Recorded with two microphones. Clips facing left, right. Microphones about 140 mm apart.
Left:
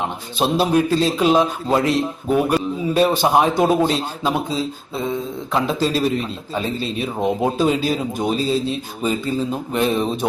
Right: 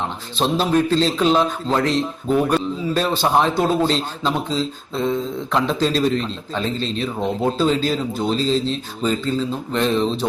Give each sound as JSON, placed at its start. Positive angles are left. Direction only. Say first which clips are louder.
{"t": 0.3, "sound": "a man's voice", "louder": "left 1 dB", "side_deg": 10}